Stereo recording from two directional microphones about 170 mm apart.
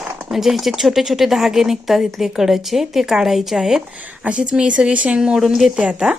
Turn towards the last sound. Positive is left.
turn(degrees=-5)  # may be behind; listen again after turning